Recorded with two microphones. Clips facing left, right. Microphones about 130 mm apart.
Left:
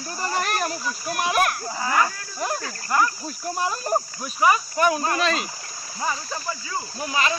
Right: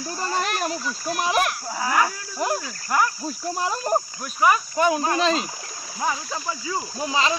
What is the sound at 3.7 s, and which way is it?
Speech, 20° right (ahead or behind).